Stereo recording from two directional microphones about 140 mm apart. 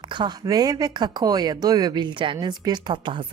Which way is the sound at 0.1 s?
30° right (ahead or behind).